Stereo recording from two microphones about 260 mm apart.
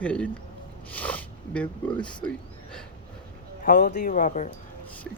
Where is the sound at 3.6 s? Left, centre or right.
Left.